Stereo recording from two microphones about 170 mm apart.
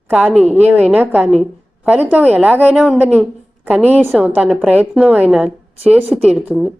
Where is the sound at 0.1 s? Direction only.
10° right (ahead or behind).